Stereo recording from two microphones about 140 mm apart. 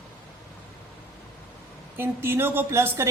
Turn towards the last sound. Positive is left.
turn(degrees=-20)  # may be behind; listen again after turning